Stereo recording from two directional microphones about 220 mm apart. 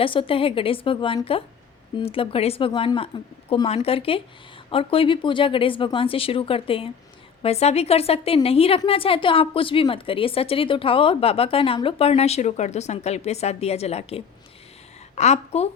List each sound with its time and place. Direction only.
0.0 s a woman's voice: 25° left (ahead or behind)